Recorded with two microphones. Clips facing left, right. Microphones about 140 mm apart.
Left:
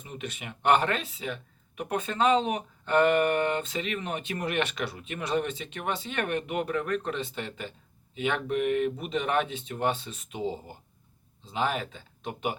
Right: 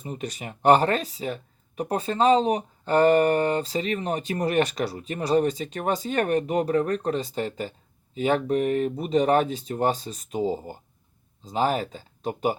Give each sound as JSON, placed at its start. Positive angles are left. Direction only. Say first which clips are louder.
{"t": 0.0, "sound": "speech", "louder": "right 5 dB", "side_deg": -40}